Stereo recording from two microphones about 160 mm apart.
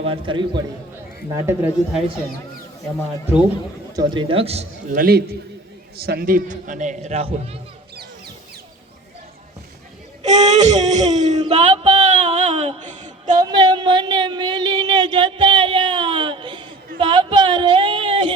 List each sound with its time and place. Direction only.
0.0 s a man's voice: 35° right (ahead or behind)
1.3 s a man's voice: 20° right (ahead or behind)
3.9 s a man's voice: 30° right (ahead or behind)
4.9 s a man's voice: 75° right (ahead or behind); by 7.3 s 40° right (ahead or behind)
10.2 s speech: 45° right (ahead or behind)
13.4 s speech: 25° right (ahead or behind)
17.0 s a sound: 30° right (ahead or behind)